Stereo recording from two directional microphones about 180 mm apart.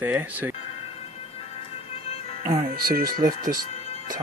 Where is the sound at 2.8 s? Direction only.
55° right (ahead or behind).